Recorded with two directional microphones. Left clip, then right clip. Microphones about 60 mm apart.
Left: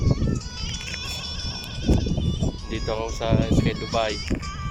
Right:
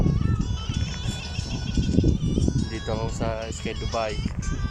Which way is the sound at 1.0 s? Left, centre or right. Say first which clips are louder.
Left 3 dB; left.